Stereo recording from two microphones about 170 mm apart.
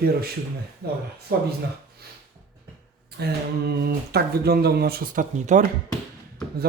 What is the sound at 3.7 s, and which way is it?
Speech, 65° right (ahead or behind).